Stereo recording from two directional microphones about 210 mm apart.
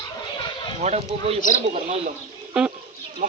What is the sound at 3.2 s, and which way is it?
Speech, 40° right (ahead or behind).